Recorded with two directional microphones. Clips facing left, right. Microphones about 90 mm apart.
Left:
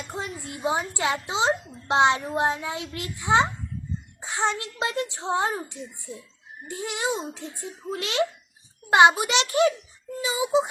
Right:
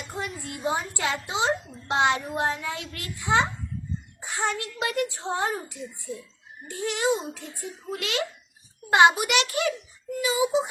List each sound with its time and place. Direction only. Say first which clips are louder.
0.1 s a woman's voice: right 2 dB; 20° left (ahead or behind)